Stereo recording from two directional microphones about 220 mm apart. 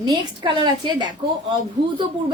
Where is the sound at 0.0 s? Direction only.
20° right (ahead or behind).